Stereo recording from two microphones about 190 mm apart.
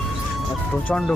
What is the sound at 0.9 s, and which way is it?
Speech, 5° left (ahead or behind).